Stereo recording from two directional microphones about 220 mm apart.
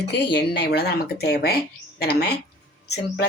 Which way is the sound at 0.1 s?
50° left (ahead or behind).